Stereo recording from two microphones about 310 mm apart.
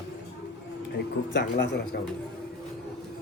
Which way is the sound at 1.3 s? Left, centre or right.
Left.